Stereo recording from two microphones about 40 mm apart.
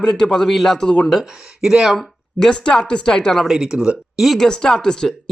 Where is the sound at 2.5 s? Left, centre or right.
Left.